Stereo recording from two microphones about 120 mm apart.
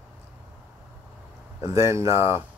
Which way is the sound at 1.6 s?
25° right (ahead or behind).